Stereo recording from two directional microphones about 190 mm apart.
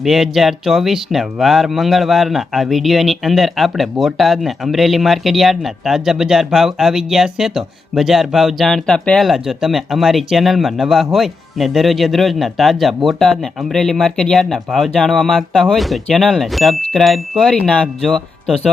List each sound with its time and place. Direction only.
0.0 s speech: centre (ahead or behind)